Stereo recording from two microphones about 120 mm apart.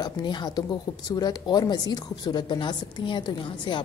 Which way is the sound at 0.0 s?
40° left (ahead or behind).